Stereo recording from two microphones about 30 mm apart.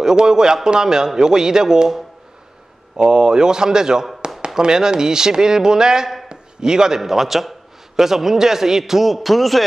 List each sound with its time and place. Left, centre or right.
0.0 s speech: right
3.0 s speech: right
4.2 s chop: right
4.6 s speech: right
6.2 s a sound: right
7.0 s a man's voice: centre